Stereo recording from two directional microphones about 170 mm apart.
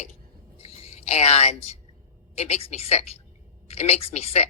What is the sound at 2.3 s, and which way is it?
A woman's voice, 40° left (ahead or behind).